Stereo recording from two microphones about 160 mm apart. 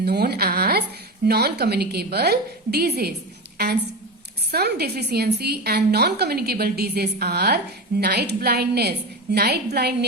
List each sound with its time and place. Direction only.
0.0 s a woman's voice: 90° right
4.5 s a woman's voice: 90° right